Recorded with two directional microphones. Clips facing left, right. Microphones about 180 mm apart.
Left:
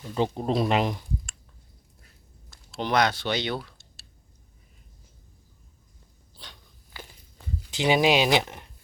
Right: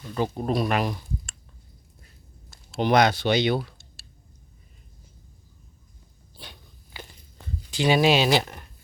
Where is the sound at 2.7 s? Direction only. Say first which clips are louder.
Right 4 dB; 15° right (ahead or behind).